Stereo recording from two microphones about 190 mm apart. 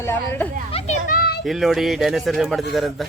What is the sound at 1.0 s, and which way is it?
Children playing, 50° left (ahead or behind).